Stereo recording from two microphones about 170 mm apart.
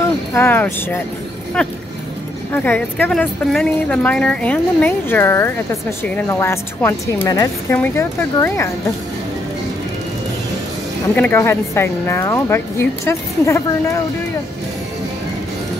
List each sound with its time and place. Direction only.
0.3 s speech: 15° left (ahead or behind)
11.1 s speech: 15° left (ahead or behind)